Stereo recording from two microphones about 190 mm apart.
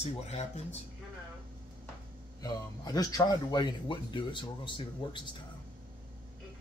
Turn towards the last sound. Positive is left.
turn(degrees=25)  # may be behind; listen again after turning